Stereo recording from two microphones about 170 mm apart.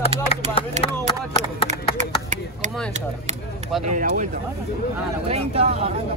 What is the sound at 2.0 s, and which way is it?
Speech, 45° right (ahead or behind).